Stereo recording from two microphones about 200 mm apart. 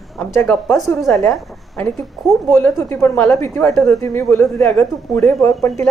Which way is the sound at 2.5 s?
15° left (ahead or behind).